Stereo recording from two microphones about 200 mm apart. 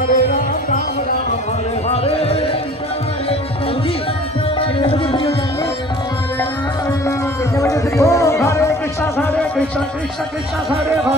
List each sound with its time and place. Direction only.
0.1 s music: 40° left (ahead or behind)
1.9 s a sound: 30° left (ahead or behind)
4.6 s music: 25° left (ahead or behind)
7.7 s music: 15° left (ahead or behind)